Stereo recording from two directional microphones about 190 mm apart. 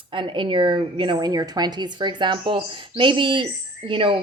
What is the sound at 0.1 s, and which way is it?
A woman's voice, 25° right (ahead or behind).